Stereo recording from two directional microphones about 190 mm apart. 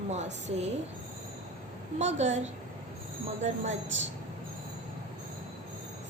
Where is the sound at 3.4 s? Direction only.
35° right (ahead or behind).